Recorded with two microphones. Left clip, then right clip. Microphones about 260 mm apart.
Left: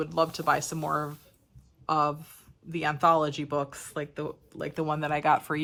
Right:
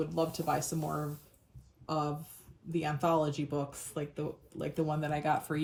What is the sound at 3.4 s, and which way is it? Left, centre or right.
Speech, left.